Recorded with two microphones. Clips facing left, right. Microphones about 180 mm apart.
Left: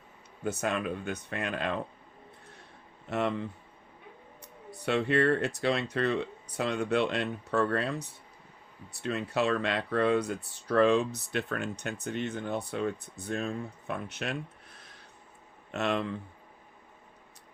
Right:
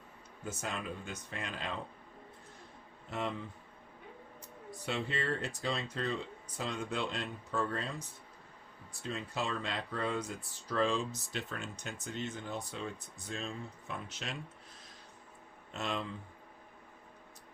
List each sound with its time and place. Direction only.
0.4 s speech: 65° left (ahead or behind)
3.1 s speech: 70° left (ahead or behind)
4.9 s speech: 65° left (ahead or behind)